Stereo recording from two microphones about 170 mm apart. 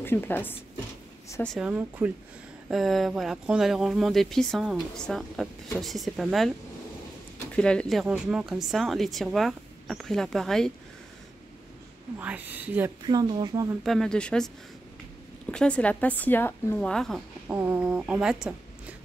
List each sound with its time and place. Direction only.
0.0 s a woman's voice: 10° left (ahead or behind)
1.7 s a woman's voice: 10° right (ahead or behind)
2.7 s speech: centre (ahead or behind)
7.5 s speech: 5° left (ahead or behind)
8.0 s speech: 5° right (ahead or behind)
12.2 s a woman's voice: 10° right (ahead or behind)
13.0 s speech: 25° right (ahead or behind)
13.8 s speech: 5° left (ahead or behind)
15.5 s a woman's voice: 5° left (ahead or behind)
17.5 s speech: 10° right (ahead or behind)